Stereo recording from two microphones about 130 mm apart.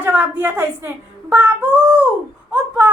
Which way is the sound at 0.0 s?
15° right (ahead or behind).